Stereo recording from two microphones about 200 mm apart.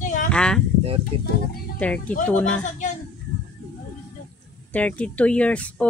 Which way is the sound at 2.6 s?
40° left (ahead or behind).